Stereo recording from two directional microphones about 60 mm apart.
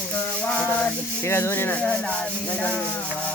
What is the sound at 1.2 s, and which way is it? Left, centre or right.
Rub, left.